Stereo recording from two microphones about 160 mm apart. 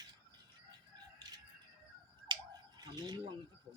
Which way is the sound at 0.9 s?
25° right (ahead or behind).